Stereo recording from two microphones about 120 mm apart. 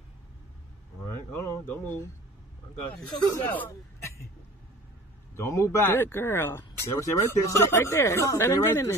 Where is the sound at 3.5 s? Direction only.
20° left (ahead or behind).